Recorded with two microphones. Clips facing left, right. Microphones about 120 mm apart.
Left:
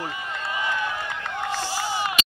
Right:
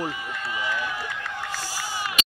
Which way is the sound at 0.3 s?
25° left (ahead or behind).